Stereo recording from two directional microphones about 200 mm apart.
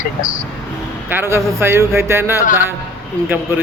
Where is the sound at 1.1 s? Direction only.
10° right (ahead or behind).